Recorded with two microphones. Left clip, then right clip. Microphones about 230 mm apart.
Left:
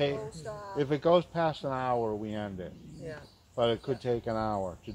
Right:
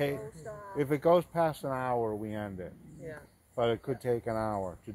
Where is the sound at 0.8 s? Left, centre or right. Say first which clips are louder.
Even; right.